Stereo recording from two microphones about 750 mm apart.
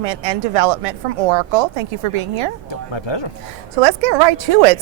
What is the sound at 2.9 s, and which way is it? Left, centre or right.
Speech, left.